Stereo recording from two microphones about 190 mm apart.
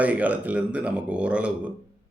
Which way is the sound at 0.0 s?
5° right (ahead or behind).